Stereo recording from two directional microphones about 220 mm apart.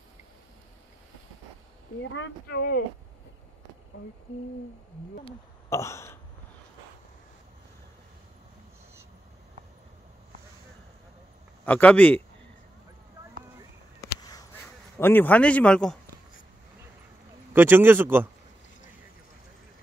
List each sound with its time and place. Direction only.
2.0 s speech: 50° left (ahead or behind)
5.7 s burping: 10° left (ahead or behind)
11.6 s speech: 5° left (ahead or behind)
15.0 s speech: 10° left (ahead or behind)
17.5 s speech: 10° right (ahead or behind)